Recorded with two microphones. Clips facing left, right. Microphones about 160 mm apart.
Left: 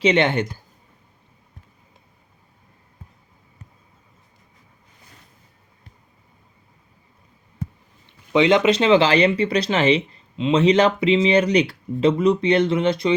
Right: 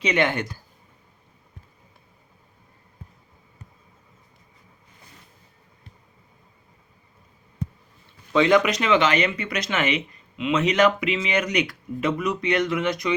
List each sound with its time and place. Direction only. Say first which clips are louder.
0.0 s speech: left 5 dB; 25° left (ahead or behind)
8.3 s speech: left 3 dB; 20° left (ahead or behind)